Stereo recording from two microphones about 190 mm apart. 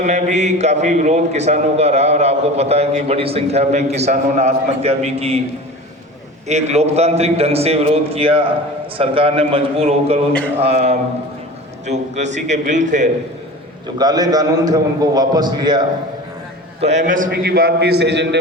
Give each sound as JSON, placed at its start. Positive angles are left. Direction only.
{"t": 0.0, "sound": "a man's voice", "side_deg": -40}
{"t": 6.5, "sound": "a man's voice", "side_deg": -35}
{"t": 13.8, "sound": "a man's voice", "side_deg": -20}
{"t": 16.8, "sound": "a man's voice", "side_deg": -40}